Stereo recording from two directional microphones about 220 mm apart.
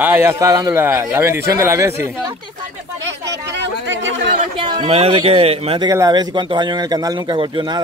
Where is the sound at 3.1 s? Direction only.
55° right (ahead or behind).